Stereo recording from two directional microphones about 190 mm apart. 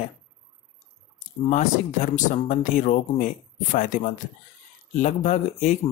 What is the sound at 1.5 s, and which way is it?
Speech, 40° left (ahead or behind).